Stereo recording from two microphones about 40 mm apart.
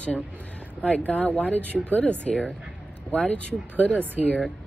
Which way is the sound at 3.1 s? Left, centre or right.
Left.